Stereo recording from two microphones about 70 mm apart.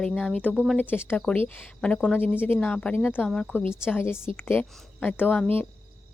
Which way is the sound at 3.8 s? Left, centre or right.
Left.